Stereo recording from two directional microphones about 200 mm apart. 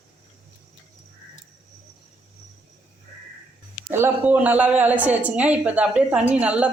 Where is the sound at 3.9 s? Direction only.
10° right (ahead or behind).